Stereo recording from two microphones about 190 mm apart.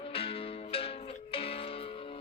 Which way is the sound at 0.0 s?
30° left (ahead or behind).